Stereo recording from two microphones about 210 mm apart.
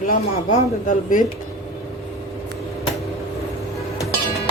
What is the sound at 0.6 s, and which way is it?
Speech, 35° left (ahead or behind).